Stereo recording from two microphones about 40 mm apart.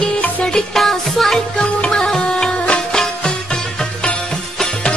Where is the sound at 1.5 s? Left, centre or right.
Left.